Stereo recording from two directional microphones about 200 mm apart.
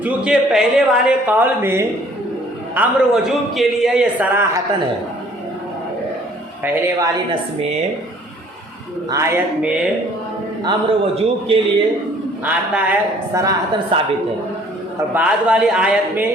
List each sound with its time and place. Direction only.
0.0 s a man's voice: centre (ahead or behind)
6.6 s speech: 10° right (ahead or behind)
9.0 s speech: 15° right (ahead or behind)
10.7 s a man's voice: 25° right (ahead or behind)
12.5 s speech: 5° right (ahead or behind)
15.1 s a man's voice: 5° right (ahead or behind)